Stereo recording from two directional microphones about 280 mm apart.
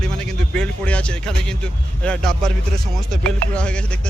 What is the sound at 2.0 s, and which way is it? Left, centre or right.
Speech, centre.